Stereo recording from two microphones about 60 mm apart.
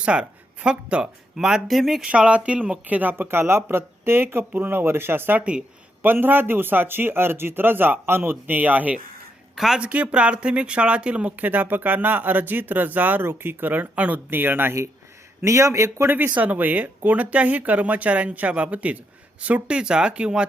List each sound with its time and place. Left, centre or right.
0.0 s speech: centre
1.6 s speech: centre
2.0 s speech: centre
9.6 s speech: centre
9.8 s speech: right
14.3 s speech: right
15.4 s speech: right
16.0 s speech: right; by 20.5 s centre